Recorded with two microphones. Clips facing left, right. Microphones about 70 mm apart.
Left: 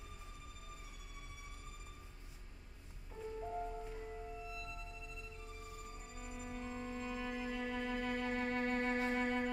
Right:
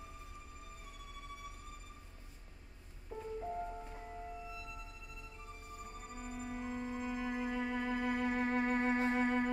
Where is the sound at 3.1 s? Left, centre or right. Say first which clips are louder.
Right 3 dB; right.